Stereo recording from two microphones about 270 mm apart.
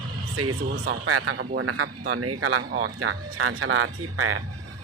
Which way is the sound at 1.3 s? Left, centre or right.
Right.